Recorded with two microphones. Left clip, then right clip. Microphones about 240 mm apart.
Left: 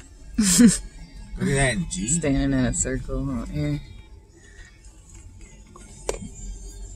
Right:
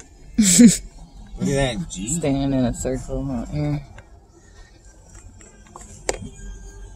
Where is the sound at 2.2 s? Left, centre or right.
Centre.